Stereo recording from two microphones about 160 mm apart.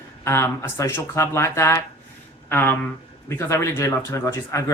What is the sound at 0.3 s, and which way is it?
Speech, 15° left (ahead or behind).